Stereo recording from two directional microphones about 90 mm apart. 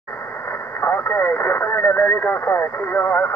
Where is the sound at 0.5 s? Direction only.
25° left (ahead or behind).